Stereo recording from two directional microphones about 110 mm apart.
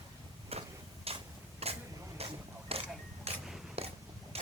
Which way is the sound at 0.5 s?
65° right (ahead or behind).